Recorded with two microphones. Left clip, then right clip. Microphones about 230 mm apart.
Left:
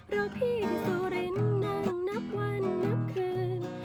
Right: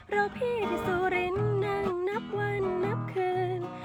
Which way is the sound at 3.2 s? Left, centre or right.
Centre.